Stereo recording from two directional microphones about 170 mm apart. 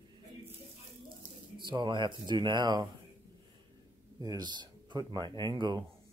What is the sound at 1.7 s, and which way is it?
Speech, 25° right (ahead or behind).